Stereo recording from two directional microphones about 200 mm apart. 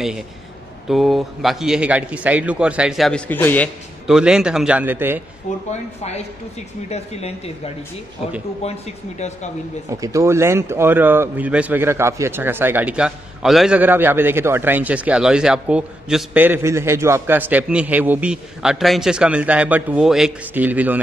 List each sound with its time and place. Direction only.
0.8 s speech: centre (ahead or behind)
4.1 s speech: 5° right (ahead or behind)
5.7 s speech: 35° left (ahead or behind)
8.6 s speech: 35° left (ahead or behind)
9.8 s speech: 15° right (ahead or behind)